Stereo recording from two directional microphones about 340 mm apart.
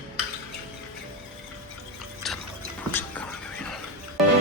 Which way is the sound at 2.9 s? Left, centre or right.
Centre.